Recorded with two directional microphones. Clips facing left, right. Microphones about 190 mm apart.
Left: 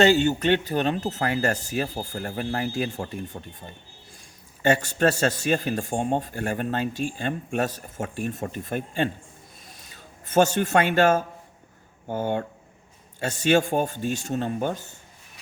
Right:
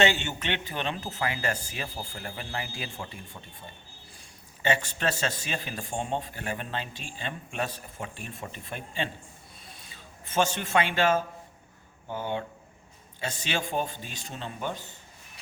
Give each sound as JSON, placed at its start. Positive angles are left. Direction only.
{"t": 0.0, "sound": "a man's voice", "side_deg": 40}
{"t": 4.6, "sound": "a man's voice", "side_deg": 45}
{"t": 9.6, "sound": "a sound", "side_deg": 45}
{"t": 12.0, "sound": "a man's voice", "side_deg": 50}